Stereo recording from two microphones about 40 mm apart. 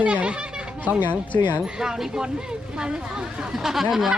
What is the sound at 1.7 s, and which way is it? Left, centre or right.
Speech, centre.